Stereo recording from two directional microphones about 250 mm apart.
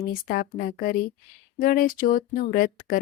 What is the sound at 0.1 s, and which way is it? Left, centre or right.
Speech, left.